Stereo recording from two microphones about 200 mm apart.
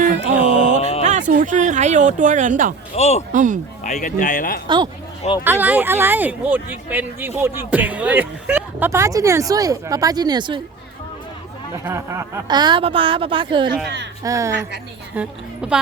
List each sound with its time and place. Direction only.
0.4 s a sound: 30° left (ahead or behind)
1.3 s speech: 40° right (ahead or behind)
2.9 s speech: 35° left (ahead or behind)
3.3 s speech: 40° right (ahead or behind)
3.8 s speech: 40° left (ahead or behind)
5.4 s speech: 10° right (ahead or behind)
11.9 s a woman's voice: 15° right (ahead or behind)
13.8 s speech: 60° right (ahead or behind)
14.3 s a woman's voice: 15° right (ahead or behind)